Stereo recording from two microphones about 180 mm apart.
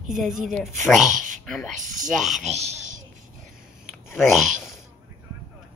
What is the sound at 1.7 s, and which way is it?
Speech, 45° right (ahead or behind).